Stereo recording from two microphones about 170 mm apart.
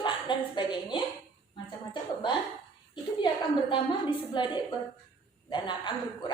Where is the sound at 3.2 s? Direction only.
30° left (ahead or behind).